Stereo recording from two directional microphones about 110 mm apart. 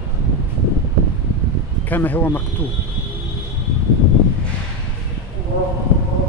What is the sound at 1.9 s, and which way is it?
Speech, 15° left (ahead or behind).